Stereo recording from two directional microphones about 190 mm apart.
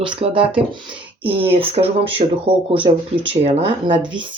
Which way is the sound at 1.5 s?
30° right (ahead or behind).